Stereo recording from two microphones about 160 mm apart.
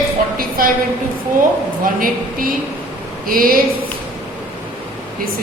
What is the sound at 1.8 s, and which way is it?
A woman's voice, 60° right (ahead or behind).